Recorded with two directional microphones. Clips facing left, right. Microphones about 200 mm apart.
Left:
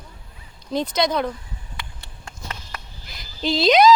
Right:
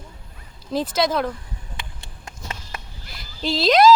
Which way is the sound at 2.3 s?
20° right (ahead or behind).